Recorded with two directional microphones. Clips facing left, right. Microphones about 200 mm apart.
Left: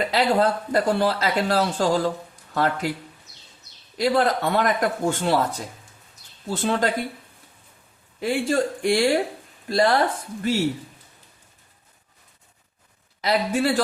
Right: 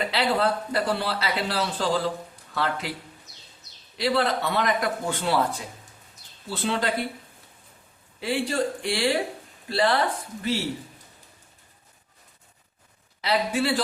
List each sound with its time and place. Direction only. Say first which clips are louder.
0.1 s speech: left 5 dB; 45° left (ahead or behind)
3.9 s speech: left 3 dB; 45° left (ahead or behind)
8.2 s speech: left 3 dB; 45° left (ahead or behind)
13.2 s speech: left 3 dB; 45° left (ahead or behind)